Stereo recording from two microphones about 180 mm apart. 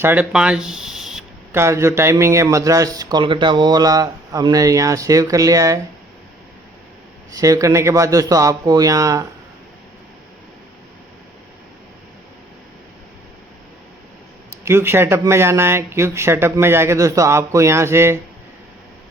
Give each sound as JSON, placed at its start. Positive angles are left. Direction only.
{"t": 0.0, "sound": "speech", "side_deg": -10}
{"t": 1.5, "sound": "speech", "side_deg": -15}
{"t": 7.3, "sound": "speech", "side_deg": -20}
{"t": 14.6, "sound": "speech", "side_deg": -15}